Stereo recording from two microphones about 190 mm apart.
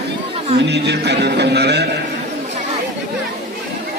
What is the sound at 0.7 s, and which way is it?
Music, 65° right (ahead or behind).